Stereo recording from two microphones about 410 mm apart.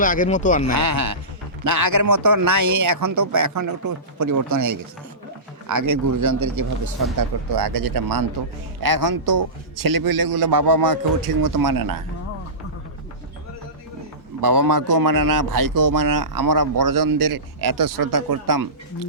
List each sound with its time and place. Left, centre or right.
0.0 s speech: centre
0.8 s a man's voice: right
7.2 s a man's voice: right
14.4 s a man's voice: right